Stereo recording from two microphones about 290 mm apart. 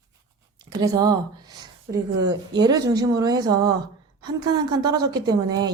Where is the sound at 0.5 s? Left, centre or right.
Centre.